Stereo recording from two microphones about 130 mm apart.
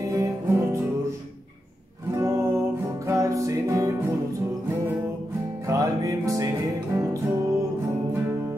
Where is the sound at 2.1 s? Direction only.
20° right (ahead or behind).